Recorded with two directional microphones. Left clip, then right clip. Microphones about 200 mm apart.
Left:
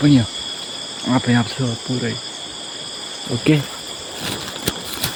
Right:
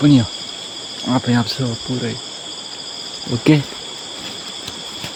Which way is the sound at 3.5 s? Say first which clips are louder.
Right 3 dB; 30° right (ahead or behind).